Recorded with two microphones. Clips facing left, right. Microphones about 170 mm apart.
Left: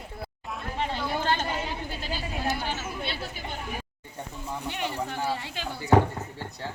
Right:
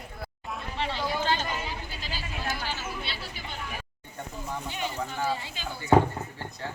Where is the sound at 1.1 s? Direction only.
50° left (ahead or behind).